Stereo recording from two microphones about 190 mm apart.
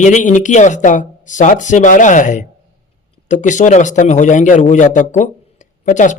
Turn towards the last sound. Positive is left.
turn(degrees=40)  # may be behind; listen again after turning